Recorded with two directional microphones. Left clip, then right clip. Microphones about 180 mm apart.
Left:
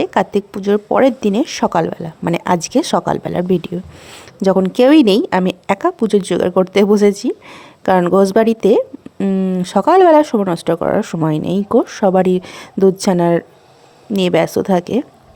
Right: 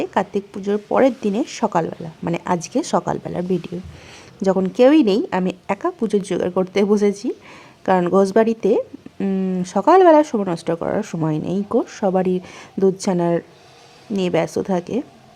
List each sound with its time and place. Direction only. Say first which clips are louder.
0.0 s speech: left 5 dB; 30° left (ahead or behind)